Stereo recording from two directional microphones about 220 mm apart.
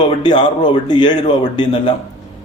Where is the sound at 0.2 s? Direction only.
20° left (ahead or behind).